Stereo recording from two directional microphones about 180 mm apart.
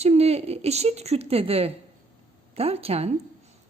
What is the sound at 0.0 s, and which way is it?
A woman's voice, 35° right (ahead or behind).